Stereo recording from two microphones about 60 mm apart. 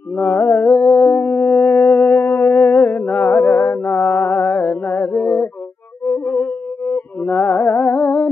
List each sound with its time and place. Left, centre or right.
0.1 s a sound: left
0.8 s howl: left
2.2 s music: left
3.2 s music: left
7.5 s music: left
8.0 s humming: left